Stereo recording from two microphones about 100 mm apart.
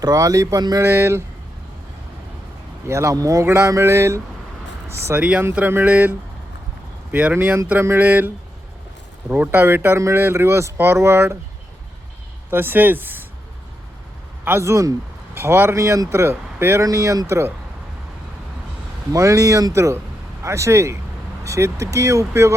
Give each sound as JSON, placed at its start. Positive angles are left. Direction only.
{"t": 0.0, "sound": "speech", "side_deg": -35}
{"t": 0.8, "sound": "speech", "side_deg": -25}
{"t": 2.8, "sound": "speech", "side_deg": -30}
{"t": 5.2, "sound": "speech", "side_deg": -10}
{"t": 9.3, "sound": "speech", "side_deg": -20}
{"t": 12.5, "sound": "speech", "side_deg": -20}
{"t": 14.4, "sound": "speech", "side_deg": -25}
{"t": 19.1, "sound": "speech", "side_deg": -30}